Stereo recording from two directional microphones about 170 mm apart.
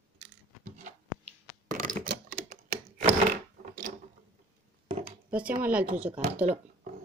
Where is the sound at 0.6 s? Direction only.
50° right (ahead or behind).